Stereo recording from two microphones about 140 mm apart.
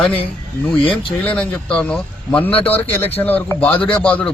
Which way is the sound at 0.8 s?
40° left (ahead or behind).